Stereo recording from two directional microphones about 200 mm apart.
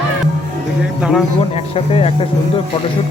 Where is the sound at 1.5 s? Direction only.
30° left (ahead or behind).